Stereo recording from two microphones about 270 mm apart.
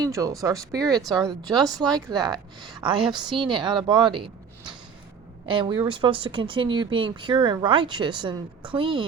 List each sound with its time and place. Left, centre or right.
0.0 s speech: centre